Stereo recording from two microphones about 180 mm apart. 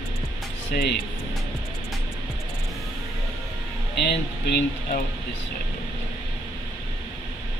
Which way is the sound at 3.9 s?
65° left (ahead or behind).